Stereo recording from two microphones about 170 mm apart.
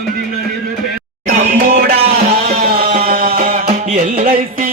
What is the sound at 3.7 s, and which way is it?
Music, 45° right (ahead or behind).